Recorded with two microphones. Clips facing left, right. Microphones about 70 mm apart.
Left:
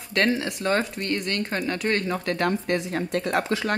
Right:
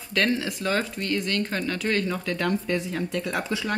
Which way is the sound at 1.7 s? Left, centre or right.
Left.